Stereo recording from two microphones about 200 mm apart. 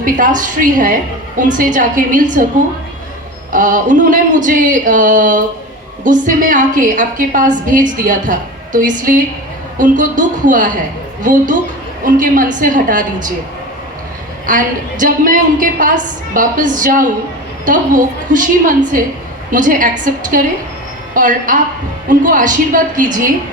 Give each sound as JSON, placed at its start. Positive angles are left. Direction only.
{"t": 0.0, "sound": "a woman's voice", "side_deg": -40}
{"t": 3.5, "sound": "a woman's voice", "side_deg": -40}
{"t": 14.4, "sound": "a woman's voice", "side_deg": -40}